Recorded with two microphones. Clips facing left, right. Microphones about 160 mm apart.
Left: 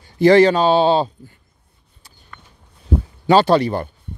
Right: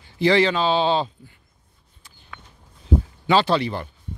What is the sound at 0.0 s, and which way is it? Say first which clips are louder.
Speech: left 7 dB; 45° left (ahead or behind).